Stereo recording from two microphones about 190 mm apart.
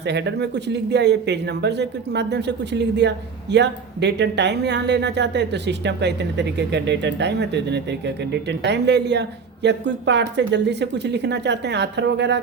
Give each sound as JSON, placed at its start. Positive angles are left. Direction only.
{"t": 0.0, "sound": "speech", "side_deg": -65}